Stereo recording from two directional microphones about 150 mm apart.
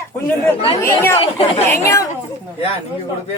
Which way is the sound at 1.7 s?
20° left (ahead or behind).